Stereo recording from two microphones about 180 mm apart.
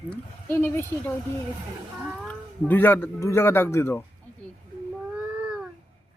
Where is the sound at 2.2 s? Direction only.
10° left (ahead or behind).